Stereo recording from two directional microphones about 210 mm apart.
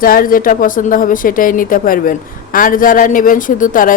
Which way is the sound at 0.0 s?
45° left (ahead or behind).